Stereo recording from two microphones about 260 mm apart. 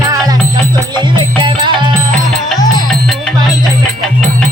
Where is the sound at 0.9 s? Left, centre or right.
Centre.